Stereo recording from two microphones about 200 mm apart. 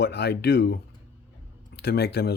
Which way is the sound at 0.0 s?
55° left (ahead or behind).